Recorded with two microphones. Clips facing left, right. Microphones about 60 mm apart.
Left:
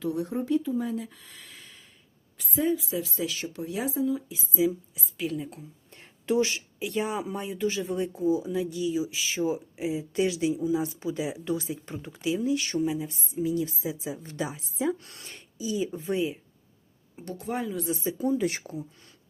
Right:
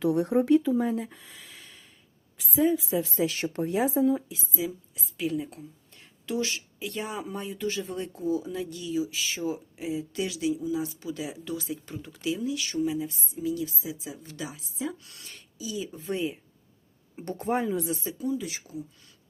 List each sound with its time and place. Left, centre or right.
0.0 s speech: right
0.8 s speech: right
1.2 s gasp: centre
2.4 s a woman's voice: centre
2.7 s speech: right
3.3 s speech: right
3.8 s speech: right
4.3 s a woman's voice: centre
5.9 s a sound: left
6.7 s speech: centre; by 12.8 s left
12.8 s speech: centre
16.1 s a woman's voice: centre
17.2 s speech: right
18.2 s speech: left